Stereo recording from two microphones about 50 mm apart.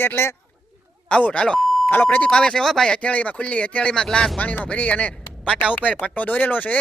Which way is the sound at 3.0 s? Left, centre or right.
Left.